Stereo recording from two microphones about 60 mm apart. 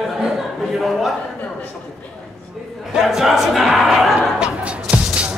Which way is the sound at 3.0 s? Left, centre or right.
Centre.